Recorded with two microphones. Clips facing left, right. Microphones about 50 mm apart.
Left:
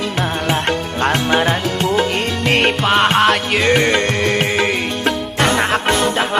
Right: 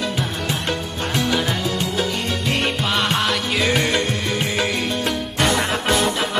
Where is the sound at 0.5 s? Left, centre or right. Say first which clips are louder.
Left 6 dB; left.